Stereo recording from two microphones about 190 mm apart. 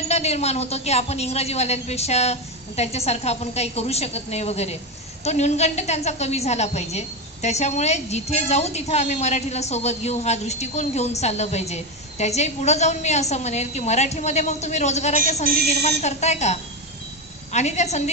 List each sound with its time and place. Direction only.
0.1 s a woman's voice: 35° left (ahead or behind)